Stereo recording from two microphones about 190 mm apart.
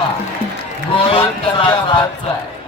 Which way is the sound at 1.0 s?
30° left (ahead or behind).